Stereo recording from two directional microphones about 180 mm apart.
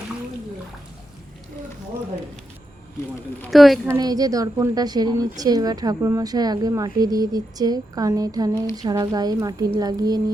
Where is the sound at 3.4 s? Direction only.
Centre (ahead or behind).